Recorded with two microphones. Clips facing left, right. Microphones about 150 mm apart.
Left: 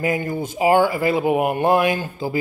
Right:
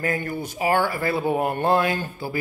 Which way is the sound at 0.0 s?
15° left (ahead or behind).